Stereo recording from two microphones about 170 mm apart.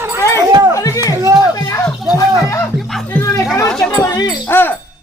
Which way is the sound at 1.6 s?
20° left (ahead or behind).